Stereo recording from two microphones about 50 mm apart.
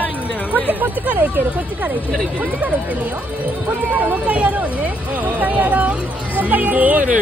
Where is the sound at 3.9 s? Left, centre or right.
Right.